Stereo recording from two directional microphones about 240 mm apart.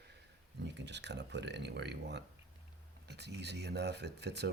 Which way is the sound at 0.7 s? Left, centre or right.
Right.